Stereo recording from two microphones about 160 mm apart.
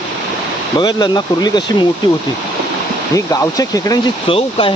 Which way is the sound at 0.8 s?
25° left (ahead or behind).